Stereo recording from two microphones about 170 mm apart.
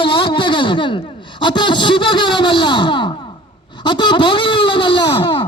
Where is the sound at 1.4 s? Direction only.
25° left (ahead or behind).